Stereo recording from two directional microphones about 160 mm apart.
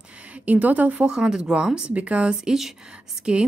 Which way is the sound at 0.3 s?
10° right (ahead or behind).